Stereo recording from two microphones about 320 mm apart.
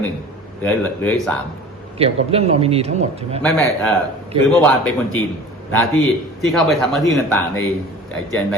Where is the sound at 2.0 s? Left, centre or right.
Centre.